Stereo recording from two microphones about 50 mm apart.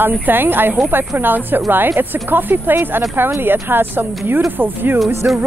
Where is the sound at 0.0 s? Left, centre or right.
Right.